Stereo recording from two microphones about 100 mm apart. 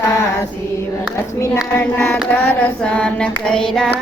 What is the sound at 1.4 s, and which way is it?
Speech, 30° left (ahead or behind).